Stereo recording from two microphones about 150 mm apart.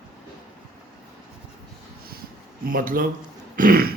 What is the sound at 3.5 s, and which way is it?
Throat clearing, 70° right (ahead or behind).